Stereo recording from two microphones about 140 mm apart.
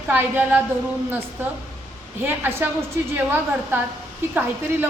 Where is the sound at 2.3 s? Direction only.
15° right (ahead or behind).